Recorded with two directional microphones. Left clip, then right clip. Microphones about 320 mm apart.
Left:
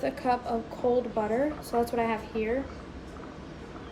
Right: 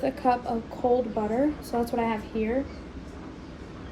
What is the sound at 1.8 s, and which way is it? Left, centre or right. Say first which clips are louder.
Speech: right 1 dB; centre.